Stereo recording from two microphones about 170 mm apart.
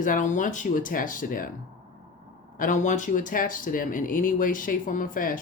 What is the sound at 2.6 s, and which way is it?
Speech, 50° left (ahead or behind).